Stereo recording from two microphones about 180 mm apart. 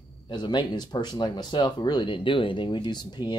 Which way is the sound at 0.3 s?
25° left (ahead or behind).